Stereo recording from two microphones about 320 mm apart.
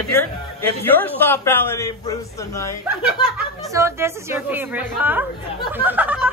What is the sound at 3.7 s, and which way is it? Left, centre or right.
Speech, centre.